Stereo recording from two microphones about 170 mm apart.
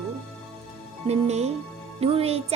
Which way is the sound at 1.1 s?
40° right (ahead or behind).